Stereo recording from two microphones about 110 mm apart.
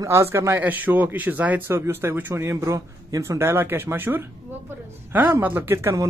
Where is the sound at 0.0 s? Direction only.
25° right (ahead or behind).